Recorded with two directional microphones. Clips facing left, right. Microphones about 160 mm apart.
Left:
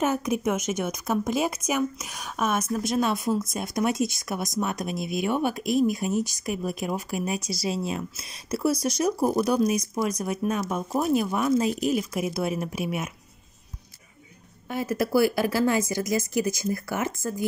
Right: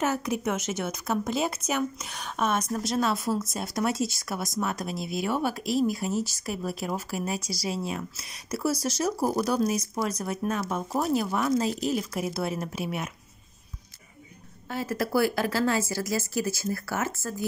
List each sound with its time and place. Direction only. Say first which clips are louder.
0.0 s speech: left 3 dB; 15° left (ahead or behind)
14.7 s speech: left 3 dB; 15° left (ahead or behind)